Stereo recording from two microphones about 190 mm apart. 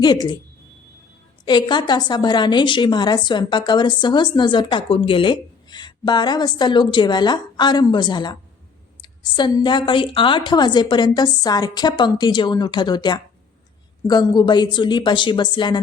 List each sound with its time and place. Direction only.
0.0 s a woman's voice: 20° left (ahead or behind)
1.5 s a woman's voice: 25° left (ahead or behind)